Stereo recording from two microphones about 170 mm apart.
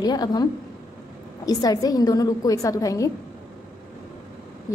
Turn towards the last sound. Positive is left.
turn(degrees=20)  # may be behind; listen again after turning